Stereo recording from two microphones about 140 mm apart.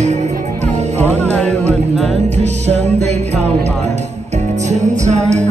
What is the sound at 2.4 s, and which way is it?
Music, 50° right (ahead or behind).